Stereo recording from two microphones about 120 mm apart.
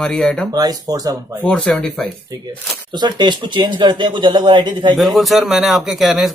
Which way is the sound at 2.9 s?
40° right (ahead or behind).